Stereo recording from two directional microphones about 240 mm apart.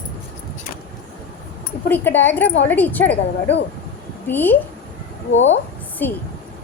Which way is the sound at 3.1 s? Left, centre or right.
Left.